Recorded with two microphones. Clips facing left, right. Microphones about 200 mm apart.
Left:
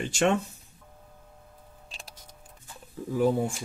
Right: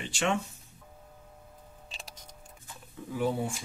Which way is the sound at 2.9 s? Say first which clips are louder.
Left 6 dB; 40° left (ahead or behind).